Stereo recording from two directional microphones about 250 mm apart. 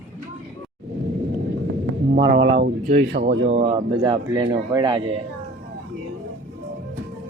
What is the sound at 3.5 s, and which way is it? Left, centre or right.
Speech, right.